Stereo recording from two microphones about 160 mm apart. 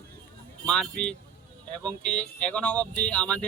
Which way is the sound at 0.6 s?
5° left (ahead or behind).